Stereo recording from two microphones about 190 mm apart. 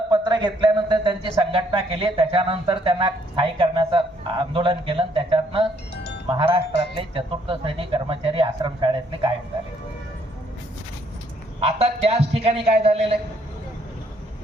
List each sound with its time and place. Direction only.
0.1 s a man's voice: 25° right (ahead or behind)
11.6 s a man's voice: 30° right (ahead or behind)